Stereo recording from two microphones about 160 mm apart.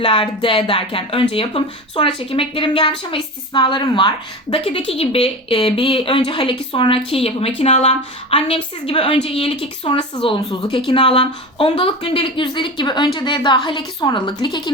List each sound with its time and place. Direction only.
0.0 s a woman's voice: 35° left (ahead or behind)